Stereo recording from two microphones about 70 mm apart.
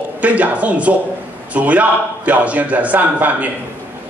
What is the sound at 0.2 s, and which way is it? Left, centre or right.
A man's voice, right.